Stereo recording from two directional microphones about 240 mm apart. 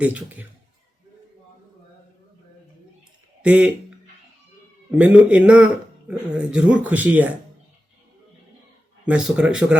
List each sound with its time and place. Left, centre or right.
0.0 s speech: centre
3.4 s a man's voice: centre
9.0 s a man's voice: centre